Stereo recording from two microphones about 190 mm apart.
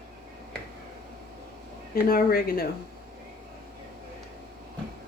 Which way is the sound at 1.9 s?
50° left (ahead or behind).